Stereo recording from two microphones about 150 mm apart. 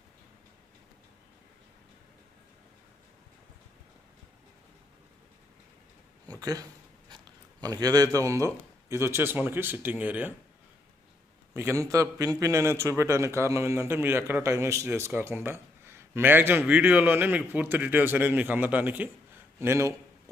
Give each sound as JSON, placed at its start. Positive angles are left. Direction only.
{"t": 6.4, "sound": "speech", "side_deg": -25}
{"t": 11.5, "sound": "a man's voice", "side_deg": -15}